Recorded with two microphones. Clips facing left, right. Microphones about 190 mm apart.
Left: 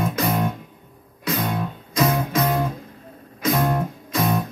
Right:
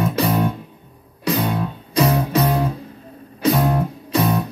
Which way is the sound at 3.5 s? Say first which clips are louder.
Even; centre (ahead or behind).